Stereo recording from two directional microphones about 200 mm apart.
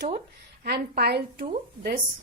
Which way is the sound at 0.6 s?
50° right (ahead or behind).